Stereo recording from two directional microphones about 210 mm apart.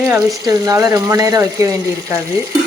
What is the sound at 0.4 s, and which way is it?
Frying, 15° right (ahead or behind).